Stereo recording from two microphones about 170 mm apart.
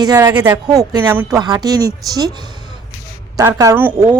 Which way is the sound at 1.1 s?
10° right (ahead or behind).